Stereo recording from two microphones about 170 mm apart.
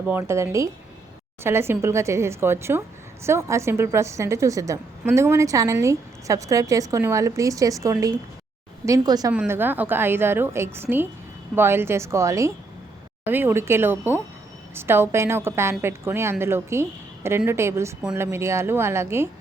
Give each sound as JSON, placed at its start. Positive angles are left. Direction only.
{"t": 0.1, "sound": "a woman's voice", "side_deg": -15}
{"t": 9.3, "sound": "a woman's voice", "side_deg": -10}